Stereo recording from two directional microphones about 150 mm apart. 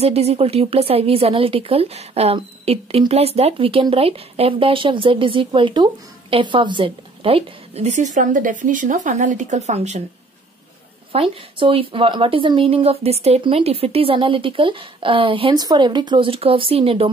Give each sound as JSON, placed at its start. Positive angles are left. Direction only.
{"t": 0.0, "sound": "a woman's voice", "side_deg": -45}
{"t": 11.1, "sound": "speech", "side_deg": -35}